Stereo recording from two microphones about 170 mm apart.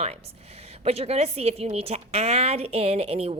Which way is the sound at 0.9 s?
35° right (ahead or behind).